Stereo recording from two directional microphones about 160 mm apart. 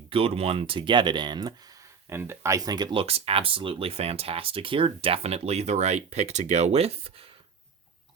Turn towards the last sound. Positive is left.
turn(degrees=-35)  # may be behind; listen again after turning